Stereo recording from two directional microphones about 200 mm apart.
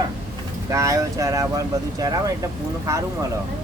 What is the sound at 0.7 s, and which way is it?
Speech, 15° right (ahead or behind).